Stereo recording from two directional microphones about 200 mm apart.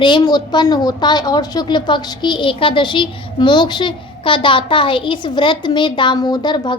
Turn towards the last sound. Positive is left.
turn(degrees=20)  # may be behind; listen again after turning